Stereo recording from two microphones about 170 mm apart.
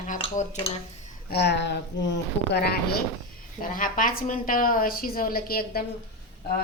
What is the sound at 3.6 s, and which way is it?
A woman's voice, 55° left (ahead or behind).